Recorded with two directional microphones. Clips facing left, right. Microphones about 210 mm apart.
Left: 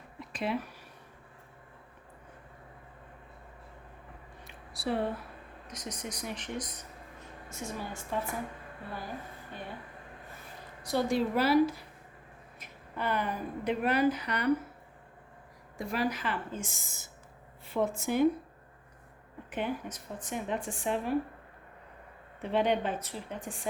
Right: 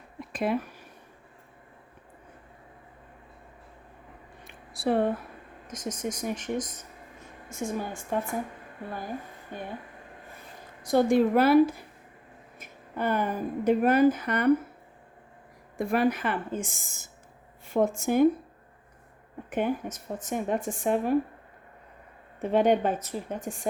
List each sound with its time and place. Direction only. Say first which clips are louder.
0.2 s a sound: right 5 dB; 50° right (ahead or behind)
4.4 s a sound: right 6 dB; 50° right (ahead or behind)
5.6 s speech: right 8 dB; 45° right (ahead or behind)
9.5 s speech: right 6 dB; 50° right (ahead or behind)
10.8 s a woman's voice: right 7 dB; 50° right (ahead or behind)
15.8 s speech: right 7 dB; 55° right (ahead or behind)
19.5 s speech: right 6 dB; 50° right (ahead or behind)
22.4 s speech: right 6 dB; 45° right (ahead or behind)